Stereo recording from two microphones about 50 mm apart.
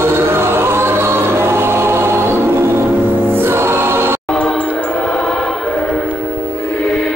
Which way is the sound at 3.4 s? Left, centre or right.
Right.